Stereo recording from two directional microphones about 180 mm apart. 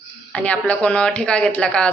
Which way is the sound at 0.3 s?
5° left (ahead or behind).